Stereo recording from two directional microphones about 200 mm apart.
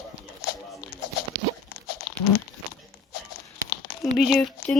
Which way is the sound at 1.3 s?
15° right (ahead or behind).